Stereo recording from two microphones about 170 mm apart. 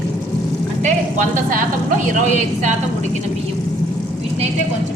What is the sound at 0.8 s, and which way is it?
Speech, 50° right (ahead or behind).